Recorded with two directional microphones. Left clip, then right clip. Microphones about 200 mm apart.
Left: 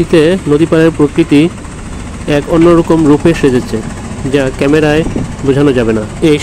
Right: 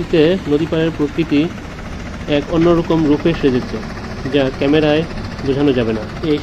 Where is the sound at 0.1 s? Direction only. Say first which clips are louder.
Left 3 dB; 45° left (ahead or behind).